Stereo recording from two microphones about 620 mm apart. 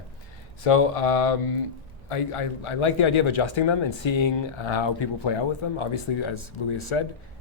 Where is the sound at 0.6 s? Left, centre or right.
Left.